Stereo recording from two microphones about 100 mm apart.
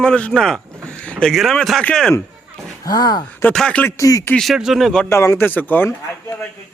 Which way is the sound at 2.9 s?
40° left (ahead or behind).